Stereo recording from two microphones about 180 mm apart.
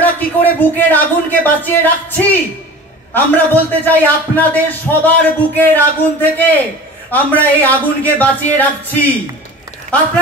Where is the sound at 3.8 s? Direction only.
10° left (ahead or behind).